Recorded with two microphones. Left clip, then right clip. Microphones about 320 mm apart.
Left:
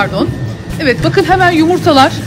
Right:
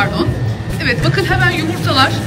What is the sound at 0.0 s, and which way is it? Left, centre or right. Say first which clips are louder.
Speech: left 2 dB; centre.